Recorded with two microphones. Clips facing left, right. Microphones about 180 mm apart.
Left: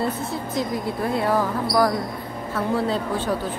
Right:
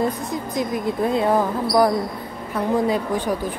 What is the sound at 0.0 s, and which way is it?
A woman's voice, 15° right (ahead or behind).